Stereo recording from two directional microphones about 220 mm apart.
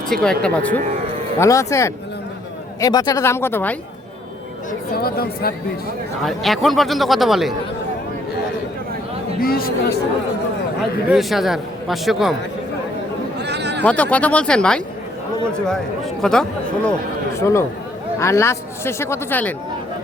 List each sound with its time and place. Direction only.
0.1 s speech: 5° left (ahead or behind)
4.9 s speech: 45° left (ahead or behind)
6.2 s speech: centre (ahead or behind)
9.4 s speech: 40° left (ahead or behind)
11.1 s speech: centre (ahead or behind)
13.4 s a sound: 50° right (ahead or behind)
13.8 s speech: 5° left (ahead or behind)
17.3 s speech: 15° left (ahead or behind)